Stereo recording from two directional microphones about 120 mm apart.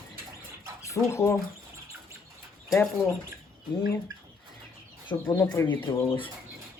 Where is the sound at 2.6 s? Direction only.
5° left (ahead or behind).